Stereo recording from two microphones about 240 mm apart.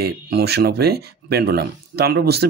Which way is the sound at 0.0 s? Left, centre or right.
Right.